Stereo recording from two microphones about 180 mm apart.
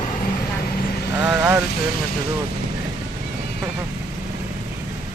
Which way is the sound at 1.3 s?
10° right (ahead or behind).